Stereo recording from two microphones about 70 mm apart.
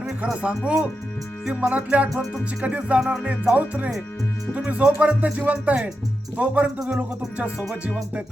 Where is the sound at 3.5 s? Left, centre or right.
Right.